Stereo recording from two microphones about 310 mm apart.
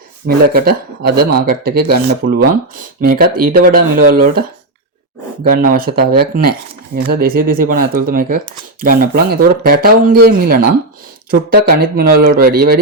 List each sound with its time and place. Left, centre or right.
0.3 s speech: right